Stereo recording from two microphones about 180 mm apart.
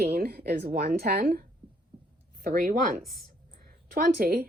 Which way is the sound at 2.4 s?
45° right (ahead or behind).